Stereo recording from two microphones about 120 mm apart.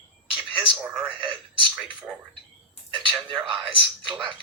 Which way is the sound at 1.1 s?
40° right (ahead or behind).